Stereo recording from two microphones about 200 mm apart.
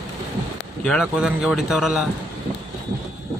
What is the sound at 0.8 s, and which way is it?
Speech, centre (ahead or behind).